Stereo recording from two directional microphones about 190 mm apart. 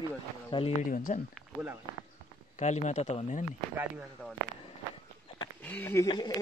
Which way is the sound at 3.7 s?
10° right (ahead or behind).